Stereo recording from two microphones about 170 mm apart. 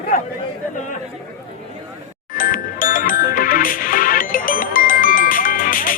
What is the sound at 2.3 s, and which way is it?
Music, 55° left (ahead or behind).